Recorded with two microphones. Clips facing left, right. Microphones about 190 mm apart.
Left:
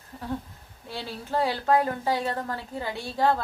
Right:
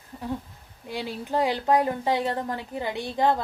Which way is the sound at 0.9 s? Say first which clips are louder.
Right 3 dB; 15° right (ahead or behind).